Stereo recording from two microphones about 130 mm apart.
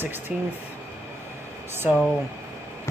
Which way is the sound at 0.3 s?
5° right (ahead or behind).